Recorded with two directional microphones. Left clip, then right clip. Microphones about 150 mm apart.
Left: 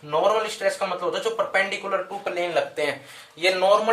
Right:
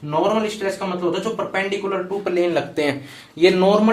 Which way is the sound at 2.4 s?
40° right (ahead or behind).